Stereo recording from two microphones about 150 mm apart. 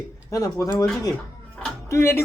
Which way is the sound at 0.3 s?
25° left (ahead or behind).